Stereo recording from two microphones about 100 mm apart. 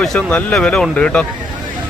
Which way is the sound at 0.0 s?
5° left (ahead or behind).